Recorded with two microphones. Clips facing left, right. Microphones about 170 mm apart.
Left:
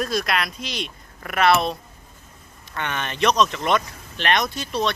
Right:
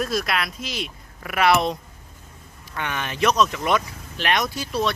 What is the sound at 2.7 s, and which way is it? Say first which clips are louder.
Speech: even; 5° right (ahead or behind).